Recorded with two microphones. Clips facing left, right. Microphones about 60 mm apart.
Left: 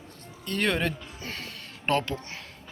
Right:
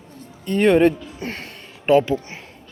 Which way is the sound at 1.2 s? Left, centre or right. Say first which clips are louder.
Right 8 dB; right.